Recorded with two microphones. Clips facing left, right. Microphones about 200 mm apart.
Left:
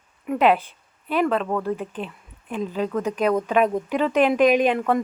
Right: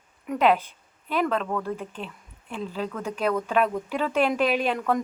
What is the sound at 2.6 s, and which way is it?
Speech, 45° left (ahead or behind).